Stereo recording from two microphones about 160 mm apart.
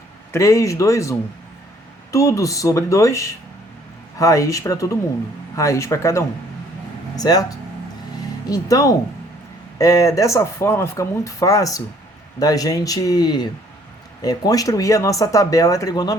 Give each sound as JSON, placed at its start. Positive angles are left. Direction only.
{"t": 0.3, "sound": "speech", "side_deg": 20}
{"t": 2.1, "sound": "speech", "side_deg": 20}
{"t": 8.4, "sound": "speech", "side_deg": 20}